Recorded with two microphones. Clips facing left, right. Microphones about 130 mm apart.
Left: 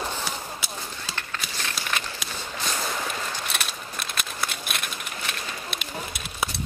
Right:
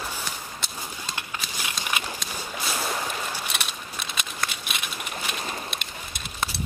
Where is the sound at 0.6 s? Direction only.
5° left (ahead or behind).